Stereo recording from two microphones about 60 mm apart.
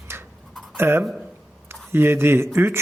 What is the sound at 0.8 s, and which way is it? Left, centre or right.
A man's voice, right.